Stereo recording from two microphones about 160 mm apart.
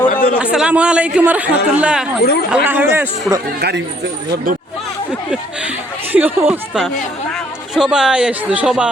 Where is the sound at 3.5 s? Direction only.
90° right.